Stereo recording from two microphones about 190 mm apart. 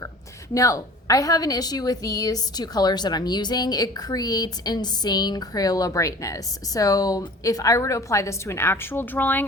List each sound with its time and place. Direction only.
0.5 s a woman's voice: 15° left (ahead or behind)